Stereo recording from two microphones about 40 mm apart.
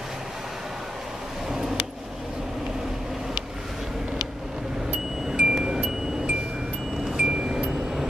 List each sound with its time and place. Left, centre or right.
1.5 s vehicle: centre
5.3 s music: centre
7.2 s chime: centre